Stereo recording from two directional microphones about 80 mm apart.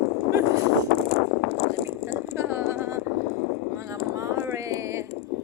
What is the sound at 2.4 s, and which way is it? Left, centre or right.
Vehicle, right.